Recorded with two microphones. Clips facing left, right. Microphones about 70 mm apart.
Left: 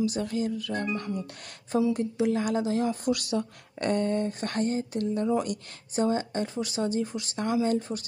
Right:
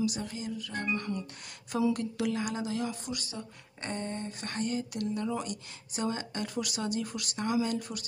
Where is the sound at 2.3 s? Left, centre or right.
Left.